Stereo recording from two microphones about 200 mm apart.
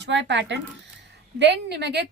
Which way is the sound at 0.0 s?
60° right (ahead or behind).